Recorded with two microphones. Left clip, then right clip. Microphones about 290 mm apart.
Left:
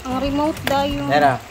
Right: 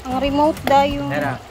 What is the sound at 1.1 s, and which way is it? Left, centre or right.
Speech, left.